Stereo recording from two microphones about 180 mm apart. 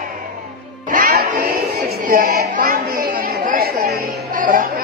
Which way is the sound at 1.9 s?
55° right (ahead or behind).